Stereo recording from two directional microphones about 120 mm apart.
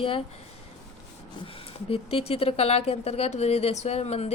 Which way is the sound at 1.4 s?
50° left (ahead or behind).